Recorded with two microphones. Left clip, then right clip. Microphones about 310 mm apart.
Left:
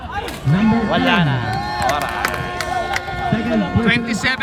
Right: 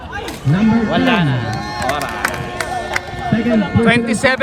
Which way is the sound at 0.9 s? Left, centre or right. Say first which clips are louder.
Right 1 dB; left.